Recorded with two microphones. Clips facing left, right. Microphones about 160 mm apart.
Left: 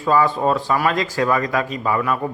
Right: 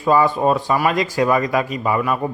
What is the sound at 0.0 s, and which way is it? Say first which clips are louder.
Speech: right 2 dB; 15° right (ahead or behind).